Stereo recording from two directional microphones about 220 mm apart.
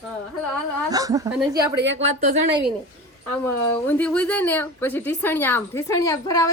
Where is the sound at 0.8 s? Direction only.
15° right (ahead or behind).